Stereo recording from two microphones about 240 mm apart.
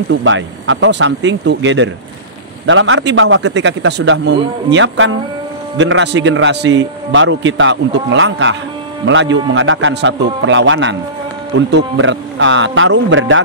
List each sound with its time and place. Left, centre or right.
0.1 s a man's voice: right